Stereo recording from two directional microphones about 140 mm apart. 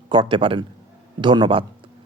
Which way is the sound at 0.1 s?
35° right (ahead or behind).